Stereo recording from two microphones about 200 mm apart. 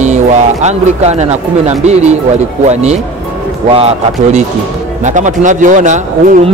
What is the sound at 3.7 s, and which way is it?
Speech, 30° right (ahead or behind).